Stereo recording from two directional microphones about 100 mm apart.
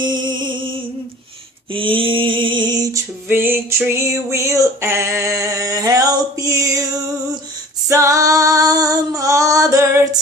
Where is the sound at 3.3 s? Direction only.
20° right (ahead or behind).